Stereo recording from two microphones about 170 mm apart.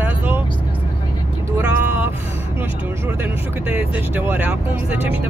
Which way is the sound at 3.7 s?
10° right (ahead or behind).